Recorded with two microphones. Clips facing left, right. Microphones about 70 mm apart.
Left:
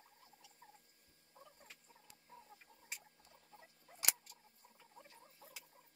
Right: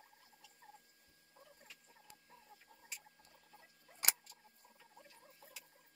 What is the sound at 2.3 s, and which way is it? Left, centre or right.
Chicken, left.